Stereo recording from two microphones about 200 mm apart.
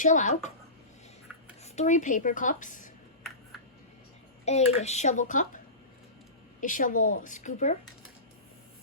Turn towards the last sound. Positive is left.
turn(degrees=35)  # may be behind; listen again after turning